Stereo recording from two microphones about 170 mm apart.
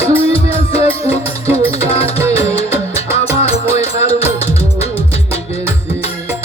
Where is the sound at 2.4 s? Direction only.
35° left (ahead or behind).